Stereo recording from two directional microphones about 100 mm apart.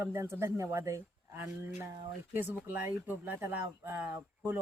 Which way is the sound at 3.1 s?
20° right (ahead or behind).